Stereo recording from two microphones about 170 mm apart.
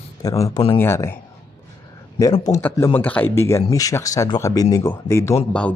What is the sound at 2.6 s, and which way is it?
Speech, 15° left (ahead or behind).